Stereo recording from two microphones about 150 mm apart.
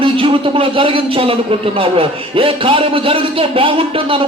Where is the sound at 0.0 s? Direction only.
35° right (ahead or behind).